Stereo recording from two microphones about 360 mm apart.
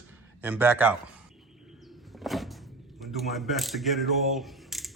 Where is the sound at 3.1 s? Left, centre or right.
Centre.